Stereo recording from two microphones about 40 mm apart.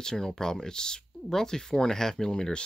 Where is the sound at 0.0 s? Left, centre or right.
Centre.